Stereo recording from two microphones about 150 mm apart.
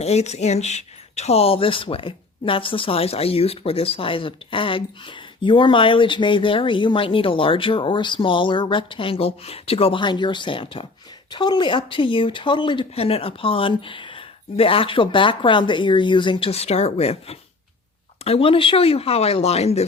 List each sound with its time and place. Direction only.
0.0 s speech: 45° left (ahead or behind)